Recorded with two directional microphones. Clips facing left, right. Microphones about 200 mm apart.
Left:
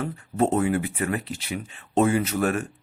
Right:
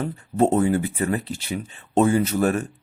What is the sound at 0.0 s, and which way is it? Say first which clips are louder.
Speech: right 3 dB; 30° right (ahead or behind).